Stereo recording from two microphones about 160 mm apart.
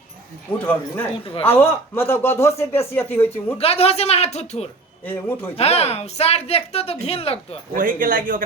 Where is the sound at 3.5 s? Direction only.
40° left (ahead or behind).